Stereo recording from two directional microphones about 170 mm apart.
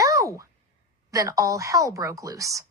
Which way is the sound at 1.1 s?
20° right (ahead or behind).